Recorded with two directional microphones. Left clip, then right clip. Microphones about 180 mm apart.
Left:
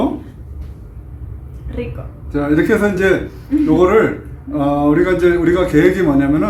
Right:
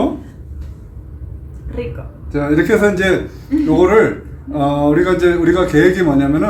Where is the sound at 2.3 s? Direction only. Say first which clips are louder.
Right 1 dB; 15° right (ahead or behind).